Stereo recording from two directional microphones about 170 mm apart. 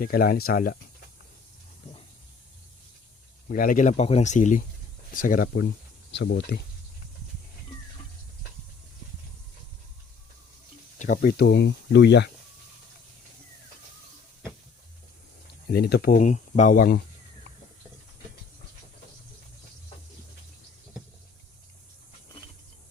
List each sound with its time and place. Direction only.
0.0 s speech: 60° left (ahead or behind)
3.5 s speech: 55° left (ahead or behind)
5.5 s speech: 90° left
10.9 s speech: 50° left (ahead or behind); by 12.3 s 90° left
15.7 s speech: 65° left (ahead or behind)